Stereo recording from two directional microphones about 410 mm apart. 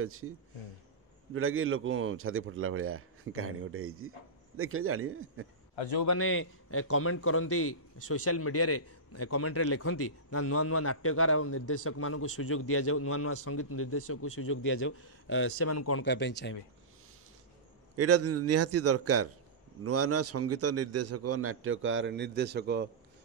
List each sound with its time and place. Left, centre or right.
0.0 s a man's voice: right
1.3 s a man's voice: right
5.8 s a man's voice: left
6.0 s a man's voice: left
17.9 s a man's voice: right